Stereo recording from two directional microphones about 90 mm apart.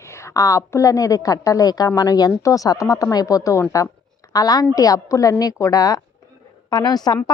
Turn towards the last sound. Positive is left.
turn(degrees=50)  # may be behind; listen again after turning